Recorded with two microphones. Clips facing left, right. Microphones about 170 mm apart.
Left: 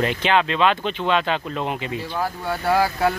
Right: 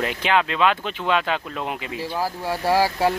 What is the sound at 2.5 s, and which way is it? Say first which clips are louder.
Speech: even; 30° right (ahead or behind).